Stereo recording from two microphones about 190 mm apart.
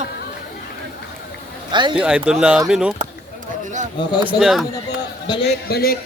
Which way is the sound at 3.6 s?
40° right (ahead or behind).